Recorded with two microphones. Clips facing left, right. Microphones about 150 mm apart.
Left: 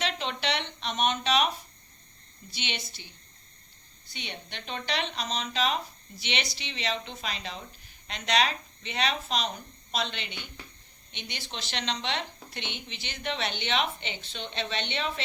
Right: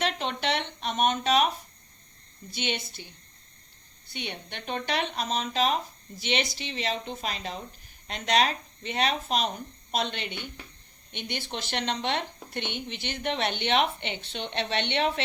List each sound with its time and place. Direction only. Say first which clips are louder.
0.0 s a sound: right 2 dB; 50° right (ahead or behind)
2.5 s speech: right 6 dB; 50° right (ahead or behind)
4.1 s speech: right 4 dB; 55° right (ahead or behind)